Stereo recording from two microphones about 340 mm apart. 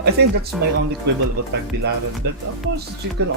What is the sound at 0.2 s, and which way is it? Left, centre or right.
Speech, right.